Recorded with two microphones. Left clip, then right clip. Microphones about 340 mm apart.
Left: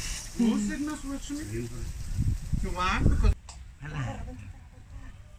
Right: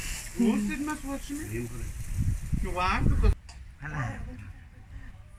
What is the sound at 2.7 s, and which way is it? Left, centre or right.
Speech, centre.